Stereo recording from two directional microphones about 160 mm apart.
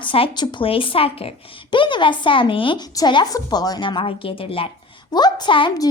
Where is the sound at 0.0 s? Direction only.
30° left (ahead or behind).